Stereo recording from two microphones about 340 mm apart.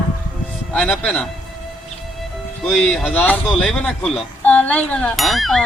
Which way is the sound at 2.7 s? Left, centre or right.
Centre.